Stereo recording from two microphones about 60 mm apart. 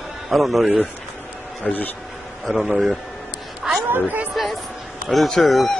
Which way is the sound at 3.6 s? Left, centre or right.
Centre.